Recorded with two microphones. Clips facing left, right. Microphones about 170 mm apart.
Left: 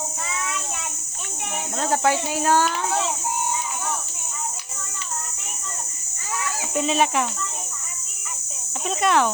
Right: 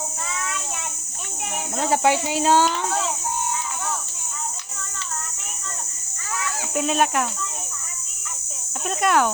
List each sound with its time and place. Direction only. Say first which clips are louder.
1.8 s speech: right 2 dB; 15° right (ahead or behind)
2.6 s child singing: even; centre (ahead or behind)
6.7 s speech: even; 5° right (ahead or behind)
9.0 s speech: even; 5° right (ahead or behind)